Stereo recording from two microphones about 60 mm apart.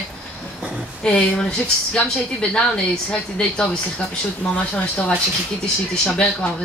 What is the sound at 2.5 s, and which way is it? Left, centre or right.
Speech, centre.